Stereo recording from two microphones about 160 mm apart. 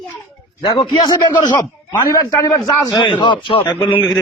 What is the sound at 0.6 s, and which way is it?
A man's voice, 30° left (ahead or behind).